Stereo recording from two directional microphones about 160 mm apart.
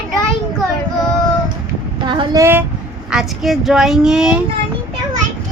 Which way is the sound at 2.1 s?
30° right (ahead or behind).